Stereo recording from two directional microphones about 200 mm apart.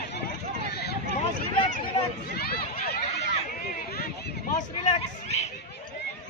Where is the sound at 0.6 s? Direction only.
55° left (ahead or behind).